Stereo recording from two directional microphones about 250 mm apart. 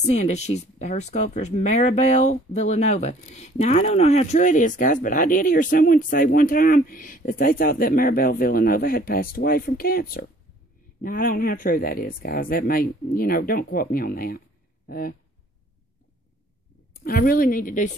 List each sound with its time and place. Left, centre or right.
0.1 s speech: left
16.9 s speech: left